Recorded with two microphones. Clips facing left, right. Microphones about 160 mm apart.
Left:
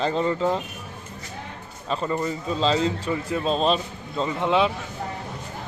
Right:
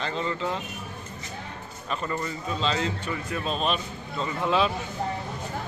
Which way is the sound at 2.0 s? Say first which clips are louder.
Left 5 dB; 20° left (ahead or behind).